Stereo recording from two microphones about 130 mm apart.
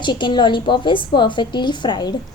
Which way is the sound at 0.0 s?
35° left (ahead or behind).